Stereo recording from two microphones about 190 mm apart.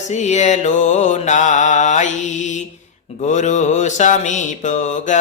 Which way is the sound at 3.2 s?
40° left (ahead or behind).